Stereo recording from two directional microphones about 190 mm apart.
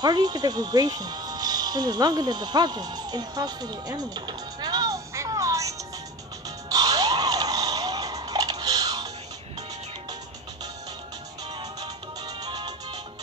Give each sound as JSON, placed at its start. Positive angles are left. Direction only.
{"t": 0.0, "sound": "speech", "side_deg": -20}
{"t": 6.7, "sound": "a sound", "side_deg": -20}
{"t": 11.5, "sound": "music", "side_deg": -20}